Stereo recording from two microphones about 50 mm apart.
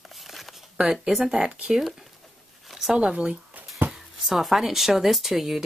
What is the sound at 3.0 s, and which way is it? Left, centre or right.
Speech, centre.